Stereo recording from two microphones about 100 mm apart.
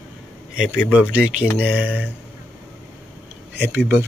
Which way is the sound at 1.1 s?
10° right (ahead or behind).